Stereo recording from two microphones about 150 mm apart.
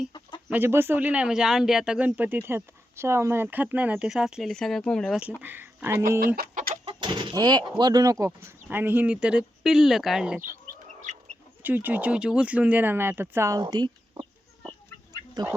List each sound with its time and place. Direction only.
0.1 s chicken: 30° left (ahead or behind)
0.5 s speech: 15° right (ahead or behind); by 5.2 s 5° left (ahead or behind)
5.4 s speech: 15° right (ahead or behind)
6.1 s speech: 80° right
6.7 s vehicle: 30° right (ahead or behind)
7.8 s speech: 25° right (ahead or behind); by 10.4 s 5° right (ahead or behind)
11.1 s chicken: 55° right (ahead or behind)
11.6 s speech: 10° right (ahead or behind)
13.6 s speech: 30° right (ahead or behind)
15.4 s speech: 30° right (ahead or behind)